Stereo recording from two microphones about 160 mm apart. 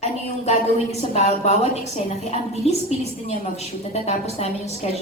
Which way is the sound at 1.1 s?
40° left (ahead or behind).